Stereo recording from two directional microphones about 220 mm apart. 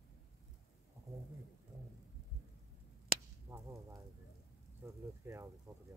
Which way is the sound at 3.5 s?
15° right (ahead or behind).